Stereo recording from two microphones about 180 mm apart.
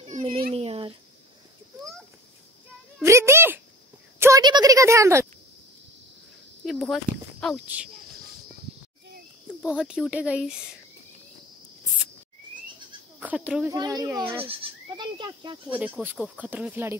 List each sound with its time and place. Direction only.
0.0 s a sound: 35° right (ahead or behind)
3.0 s cat: 15° right (ahead or behind)
4.2 s a sound: 20° right (ahead or behind)
6.6 s speech: centre (ahead or behind)
9.6 s speech: 5° right (ahead or behind)
13.2 s speech: 10° right (ahead or behind)
13.7 s a child's voice: 20° right (ahead or behind)
14.3 s speech: 30° right (ahead or behind)
15.7 s speech: 10° right (ahead or behind)